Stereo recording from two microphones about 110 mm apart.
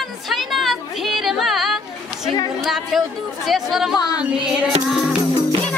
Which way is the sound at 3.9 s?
35° left (ahead or behind).